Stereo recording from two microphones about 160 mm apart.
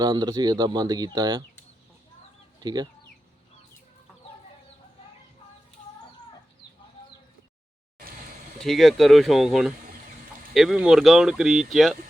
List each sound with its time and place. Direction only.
0.0 s speech: 25° right (ahead or behind)
2.6 s speech: 25° right (ahead or behind)
8.6 s speech: centre (ahead or behind)